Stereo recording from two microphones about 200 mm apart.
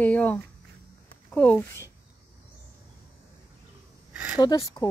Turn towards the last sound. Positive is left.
turn(degrees=20)  # may be behind; listen again after turning